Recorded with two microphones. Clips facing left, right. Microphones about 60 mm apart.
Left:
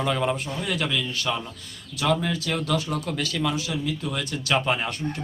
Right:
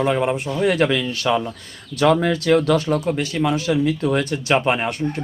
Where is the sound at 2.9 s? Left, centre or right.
Right.